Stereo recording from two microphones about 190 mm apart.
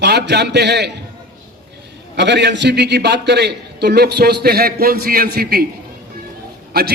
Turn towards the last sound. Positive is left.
turn(degrees=-55)  # may be behind; listen again after turning